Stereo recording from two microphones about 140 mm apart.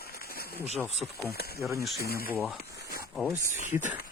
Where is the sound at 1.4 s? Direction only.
90° left.